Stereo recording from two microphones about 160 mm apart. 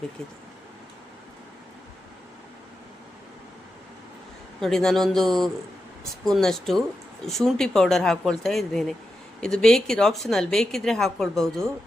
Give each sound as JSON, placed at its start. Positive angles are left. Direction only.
{"t": 4.6, "sound": "a woman's voice", "side_deg": 5}